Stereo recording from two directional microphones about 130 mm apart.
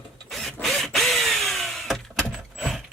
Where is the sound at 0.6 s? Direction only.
Centre (ahead or behind).